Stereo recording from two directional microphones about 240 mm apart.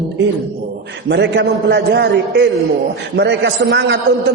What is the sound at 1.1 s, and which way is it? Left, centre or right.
A man's voice, right.